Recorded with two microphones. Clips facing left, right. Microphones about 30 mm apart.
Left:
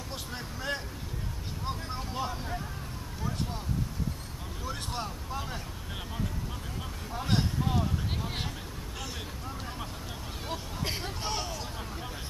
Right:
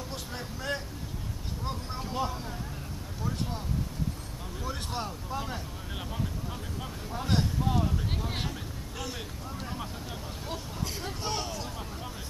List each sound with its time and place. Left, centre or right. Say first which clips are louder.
0.1 s vehicle: right 1 dB; centre
4.6 s speech: right 1 dB; centre
7.1 s speech: right 1 dB; centre
9.6 s speech: right 4 dB; centre
10.8 s speech: left 4 dB; left
11.1 s speech: right 1 dB; centre